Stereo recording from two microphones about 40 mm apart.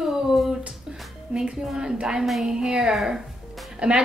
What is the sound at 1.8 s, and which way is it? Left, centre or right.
A woman's voice, centre.